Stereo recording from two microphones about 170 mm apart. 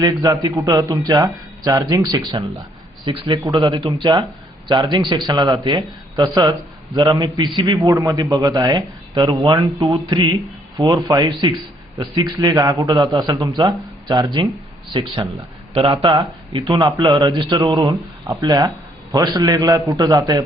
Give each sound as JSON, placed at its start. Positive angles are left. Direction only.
{"t": 0.0, "sound": "a man's voice", "side_deg": -20}